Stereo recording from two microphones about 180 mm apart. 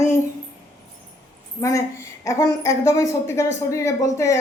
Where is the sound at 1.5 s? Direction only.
15° left (ahead or behind).